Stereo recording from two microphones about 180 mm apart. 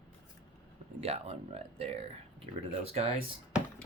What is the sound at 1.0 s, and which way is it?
Speech, 35° right (ahead or behind).